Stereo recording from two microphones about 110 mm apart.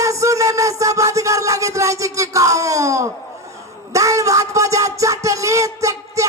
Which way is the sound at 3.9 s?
30° right (ahead or behind).